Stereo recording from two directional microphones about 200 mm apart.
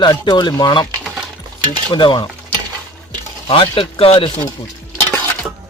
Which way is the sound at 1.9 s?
25° left (ahead or behind).